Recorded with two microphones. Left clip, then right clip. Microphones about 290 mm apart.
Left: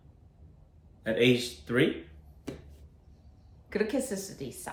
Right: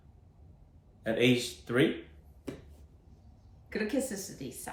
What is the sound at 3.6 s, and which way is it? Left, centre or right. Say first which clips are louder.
Speech: left 3 dB; centre.